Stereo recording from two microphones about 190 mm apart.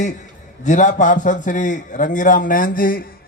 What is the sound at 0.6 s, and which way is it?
A man's voice, 40° left (ahead or behind).